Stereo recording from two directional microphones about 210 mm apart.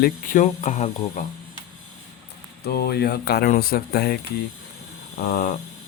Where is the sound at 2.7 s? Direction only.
50° left (ahead or behind).